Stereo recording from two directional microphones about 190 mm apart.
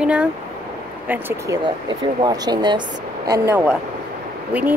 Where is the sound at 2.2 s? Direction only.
20° right (ahead or behind).